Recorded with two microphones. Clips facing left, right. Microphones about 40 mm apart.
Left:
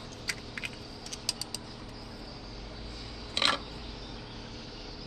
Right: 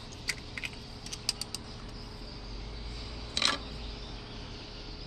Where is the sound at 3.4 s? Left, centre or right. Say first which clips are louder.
Left 3 dB; left.